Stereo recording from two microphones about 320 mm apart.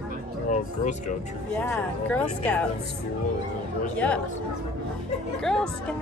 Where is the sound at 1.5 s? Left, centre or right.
Centre.